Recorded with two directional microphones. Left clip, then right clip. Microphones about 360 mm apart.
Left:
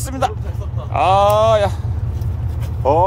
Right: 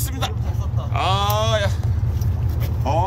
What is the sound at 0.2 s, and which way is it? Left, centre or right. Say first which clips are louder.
Speech: left 9 dB; centre.